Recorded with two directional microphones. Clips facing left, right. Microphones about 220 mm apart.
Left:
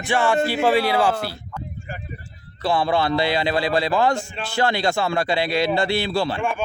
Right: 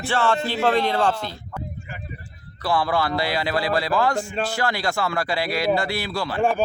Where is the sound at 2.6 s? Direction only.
25° left (ahead or behind).